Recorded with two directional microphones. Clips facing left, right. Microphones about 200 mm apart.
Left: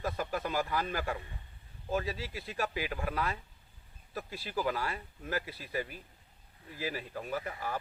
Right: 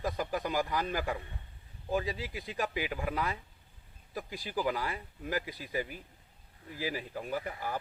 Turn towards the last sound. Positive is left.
turn(degrees=-15)  # may be behind; listen again after turning